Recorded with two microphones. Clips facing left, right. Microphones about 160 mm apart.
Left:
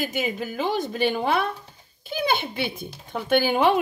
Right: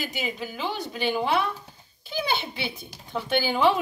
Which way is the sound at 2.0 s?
50° left (ahead or behind).